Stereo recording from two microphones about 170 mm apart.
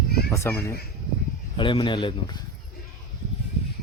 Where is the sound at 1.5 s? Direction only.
30° left (ahead or behind).